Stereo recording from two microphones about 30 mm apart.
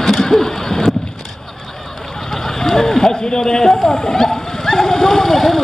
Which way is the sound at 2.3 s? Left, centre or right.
Centre.